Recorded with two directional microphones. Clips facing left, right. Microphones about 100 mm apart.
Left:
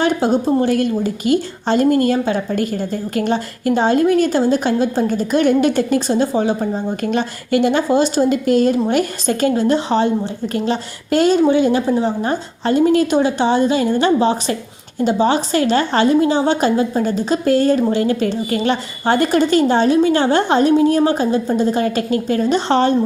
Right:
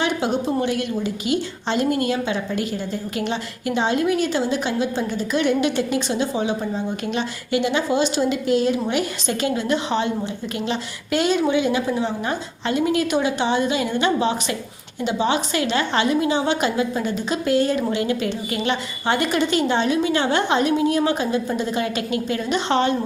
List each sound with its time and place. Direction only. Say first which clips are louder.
0.0 s a woman's voice: left 6 dB; 40° left (ahead or behind)